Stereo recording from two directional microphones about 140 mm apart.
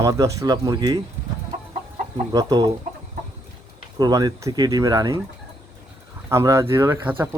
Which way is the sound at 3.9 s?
30° right (ahead or behind).